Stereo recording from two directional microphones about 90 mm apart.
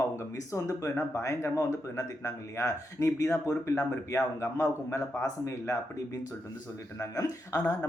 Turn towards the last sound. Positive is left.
turn(degrees=30)  # may be behind; listen again after turning